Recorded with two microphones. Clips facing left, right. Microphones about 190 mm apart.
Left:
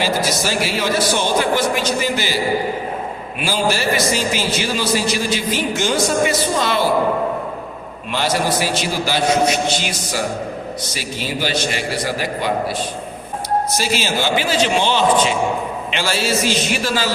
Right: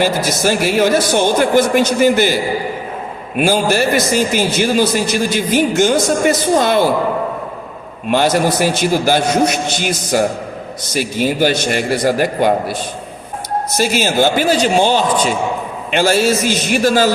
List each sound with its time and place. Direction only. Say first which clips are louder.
0.0 s a man's voice: right 4 dB; 50° right (ahead or behind)
8.1 s a man's voice: right 6 dB; 50° right (ahead or behind)
13.7 s a man's voice: right 6 dB; 50° right (ahead or behind)